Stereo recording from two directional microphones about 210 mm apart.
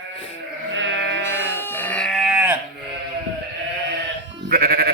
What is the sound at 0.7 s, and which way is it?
Sheep, 65° right (ahead or behind).